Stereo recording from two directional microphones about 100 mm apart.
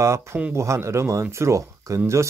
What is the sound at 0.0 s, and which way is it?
Speech, 30° right (ahead or behind).